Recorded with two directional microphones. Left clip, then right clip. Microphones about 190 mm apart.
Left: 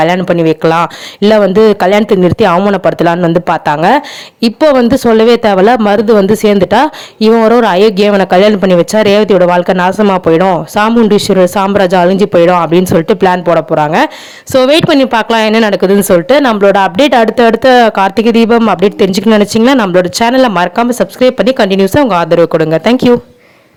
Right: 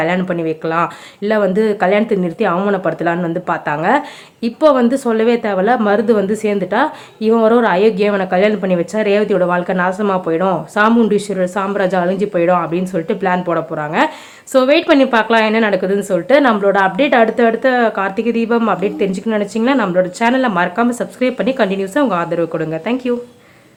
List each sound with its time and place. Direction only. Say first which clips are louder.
0.2 s speech: left 10 dB; 45° left (ahead or behind)